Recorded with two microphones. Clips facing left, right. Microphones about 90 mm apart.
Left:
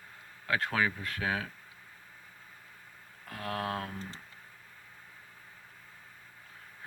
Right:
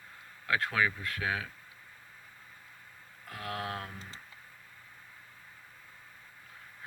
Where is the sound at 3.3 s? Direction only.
35° left (ahead or behind).